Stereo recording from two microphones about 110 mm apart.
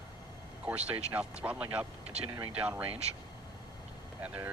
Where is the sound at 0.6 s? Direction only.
15° right (ahead or behind).